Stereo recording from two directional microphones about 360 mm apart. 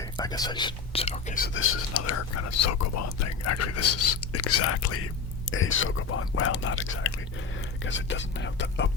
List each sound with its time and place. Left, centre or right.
0.2 s speech: centre
1.5 s speech: left